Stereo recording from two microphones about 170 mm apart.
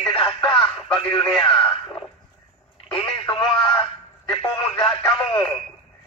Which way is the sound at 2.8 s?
5° left (ahead or behind).